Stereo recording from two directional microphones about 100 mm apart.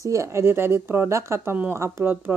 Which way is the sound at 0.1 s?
30° right (ahead or behind).